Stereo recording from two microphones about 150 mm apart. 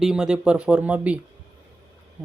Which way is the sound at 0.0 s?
5° right (ahead or behind).